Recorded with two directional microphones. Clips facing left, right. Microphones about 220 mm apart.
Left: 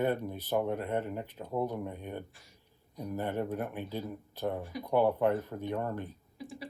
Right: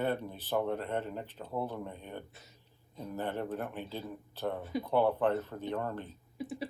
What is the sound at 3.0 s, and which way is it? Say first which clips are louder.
Speech: left 2 dB; 10° left (ahead or behind).